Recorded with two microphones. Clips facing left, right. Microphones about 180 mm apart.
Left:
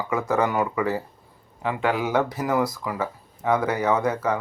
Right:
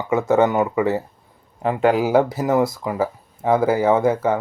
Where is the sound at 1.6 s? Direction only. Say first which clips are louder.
Right 7 dB; 35° right (ahead or behind).